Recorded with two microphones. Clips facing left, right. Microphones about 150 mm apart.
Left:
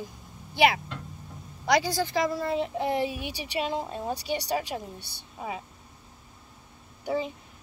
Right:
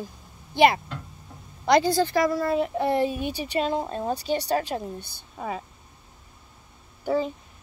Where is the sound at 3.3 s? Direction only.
50° right (ahead or behind).